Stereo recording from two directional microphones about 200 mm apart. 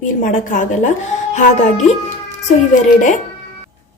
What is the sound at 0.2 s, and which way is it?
A woman's voice, 40° left (ahead or behind).